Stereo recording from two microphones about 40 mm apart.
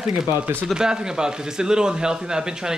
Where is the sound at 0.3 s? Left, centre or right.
Right.